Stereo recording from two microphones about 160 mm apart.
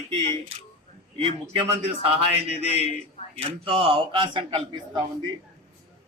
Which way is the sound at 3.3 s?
35° right (ahead or behind).